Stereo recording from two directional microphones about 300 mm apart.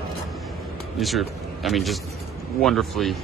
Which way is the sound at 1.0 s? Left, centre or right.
Centre.